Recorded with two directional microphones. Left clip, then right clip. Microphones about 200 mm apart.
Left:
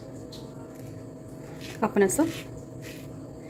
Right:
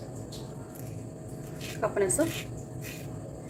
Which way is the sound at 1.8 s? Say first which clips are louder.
Left 4 dB; 45° left (ahead or behind).